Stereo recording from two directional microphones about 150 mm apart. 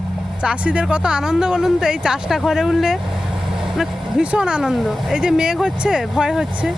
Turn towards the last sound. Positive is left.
turn(degrees=-5)  # may be behind; listen again after turning